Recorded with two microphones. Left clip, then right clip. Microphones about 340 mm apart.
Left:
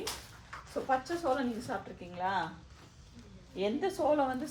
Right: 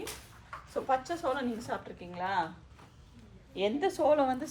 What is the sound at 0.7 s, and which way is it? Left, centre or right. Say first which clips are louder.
Speech: right 1 dB; right.